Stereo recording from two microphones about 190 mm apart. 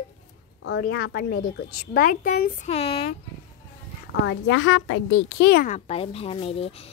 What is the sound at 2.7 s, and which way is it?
Speech, 35° left (ahead or behind).